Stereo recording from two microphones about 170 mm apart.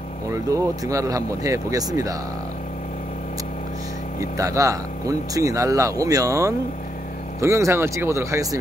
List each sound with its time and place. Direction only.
0.3 s speech: 20° right (ahead or behind)
4.2 s speech: 20° right (ahead or behind)